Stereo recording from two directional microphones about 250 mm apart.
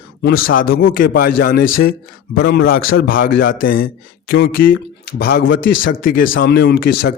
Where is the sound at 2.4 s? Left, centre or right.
Left.